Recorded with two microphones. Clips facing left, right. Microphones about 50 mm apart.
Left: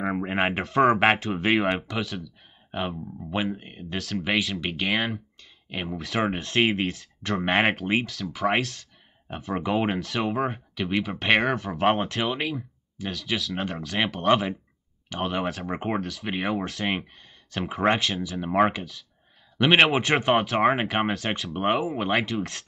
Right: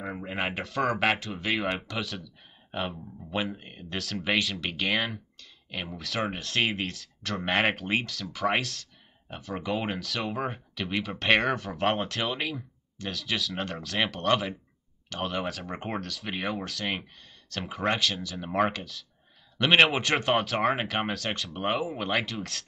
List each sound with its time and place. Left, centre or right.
0.0 s speech: left
1.8 s speech: centre
9.3 s speech: left
9.9 s speech: centre